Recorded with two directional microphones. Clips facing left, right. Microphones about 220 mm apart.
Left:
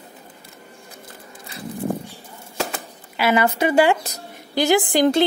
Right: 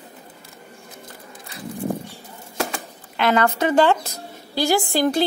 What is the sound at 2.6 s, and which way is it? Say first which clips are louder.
Typewriter: even; 5° left (ahead or behind).